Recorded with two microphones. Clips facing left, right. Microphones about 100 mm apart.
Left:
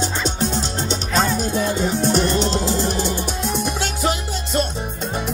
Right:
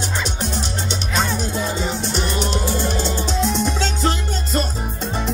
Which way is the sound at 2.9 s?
10° left (ahead or behind).